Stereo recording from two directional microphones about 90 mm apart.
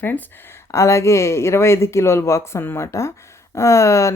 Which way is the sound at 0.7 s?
35° left (ahead or behind).